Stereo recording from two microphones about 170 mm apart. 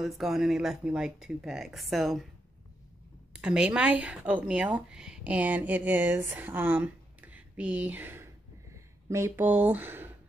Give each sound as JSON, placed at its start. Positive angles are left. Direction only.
{"t": 0.0, "sound": "speech", "side_deg": 0}
{"t": 3.3, "sound": "speech", "side_deg": -5}